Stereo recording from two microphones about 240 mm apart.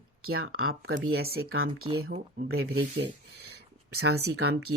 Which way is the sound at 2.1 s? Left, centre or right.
Right.